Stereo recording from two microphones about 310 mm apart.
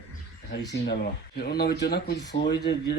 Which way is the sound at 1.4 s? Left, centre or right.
Left.